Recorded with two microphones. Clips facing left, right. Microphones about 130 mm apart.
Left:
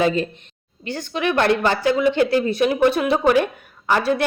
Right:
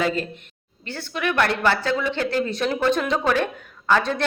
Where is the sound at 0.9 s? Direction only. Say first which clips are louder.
Left 4 dB; 15° left (ahead or behind).